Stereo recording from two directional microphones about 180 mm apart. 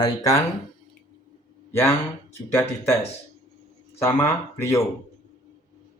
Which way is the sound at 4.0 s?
15° left (ahead or behind).